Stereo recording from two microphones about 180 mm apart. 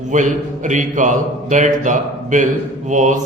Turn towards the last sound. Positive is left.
turn(degrees=-40)  # may be behind; listen again after turning